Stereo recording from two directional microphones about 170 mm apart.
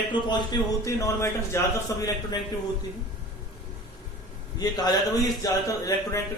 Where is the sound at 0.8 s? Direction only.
15° left (ahead or behind).